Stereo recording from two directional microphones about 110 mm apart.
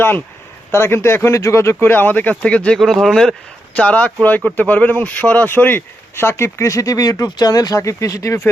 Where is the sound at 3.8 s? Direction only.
15° left (ahead or behind).